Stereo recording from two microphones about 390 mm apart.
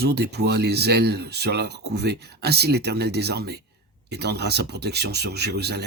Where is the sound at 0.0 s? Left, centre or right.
Right.